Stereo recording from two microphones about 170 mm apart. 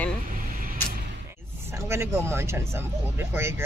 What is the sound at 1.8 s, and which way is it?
Speech, 15° right (ahead or behind).